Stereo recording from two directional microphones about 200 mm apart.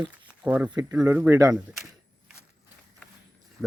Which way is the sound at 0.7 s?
15° right (ahead or behind).